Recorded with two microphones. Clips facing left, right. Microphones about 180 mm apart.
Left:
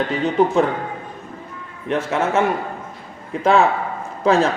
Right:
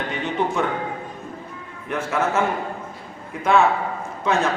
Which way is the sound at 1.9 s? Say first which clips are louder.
Left 3 dB; 25° left (ahead or behind).